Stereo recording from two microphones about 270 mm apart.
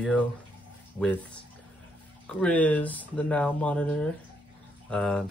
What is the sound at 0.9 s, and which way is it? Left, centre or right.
Speech, centre.